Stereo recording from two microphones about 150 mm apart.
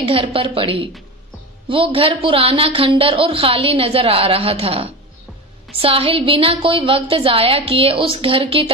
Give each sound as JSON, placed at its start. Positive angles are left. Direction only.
{"t": 0.0, "sound": "a woman's voice", "side_deg": -40}